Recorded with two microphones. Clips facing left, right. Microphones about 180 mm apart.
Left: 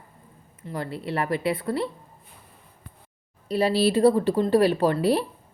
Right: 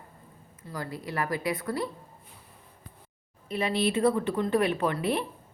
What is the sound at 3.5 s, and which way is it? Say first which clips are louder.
Speech: left 6 dB; 35° left (ahead or behind).